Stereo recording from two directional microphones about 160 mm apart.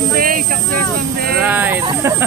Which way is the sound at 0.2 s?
60° right (ahead or behind).